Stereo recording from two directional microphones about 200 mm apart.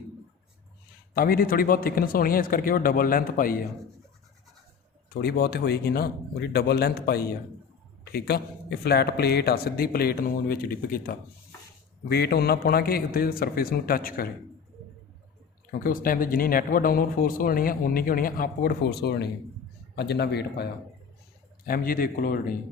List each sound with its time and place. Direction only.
1.1 s speech: 45° left (ahead or behind)
5.0 s speech: 50° left (ahead or behind)
15.8 s a man's voice: 45° left (ahead or behind)